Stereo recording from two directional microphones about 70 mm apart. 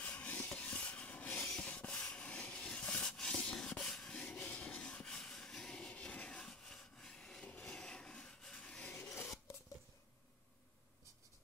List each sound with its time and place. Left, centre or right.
0.0 s rub: left